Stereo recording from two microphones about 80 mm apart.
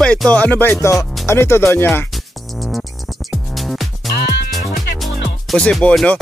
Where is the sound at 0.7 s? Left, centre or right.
Left.